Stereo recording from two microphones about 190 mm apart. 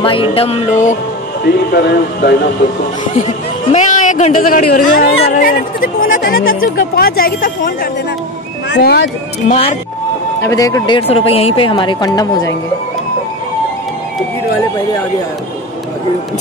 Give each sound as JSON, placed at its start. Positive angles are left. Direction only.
{"t": 0.0, "sound": "music", "side_deg": 30}
{"t": 1.4, "sound": "speech", "side_deg": 55}
{"t": 3.7, "sound": "speech", "side_deg": 40}
{"t": 8.6, "sound": "speech", "side_deg": 65}
{"t": 9.5, "sound": "speech", "side_deg": 30}
{"t": 10.4, "sound": "speech", "side_deg": 15}
{"t": 11.0, "sound": "speech", "side_deg": 30}